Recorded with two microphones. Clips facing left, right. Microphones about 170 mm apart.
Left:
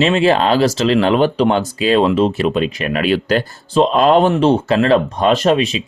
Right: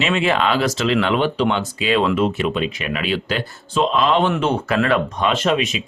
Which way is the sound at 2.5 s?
45° left (ahead or behind).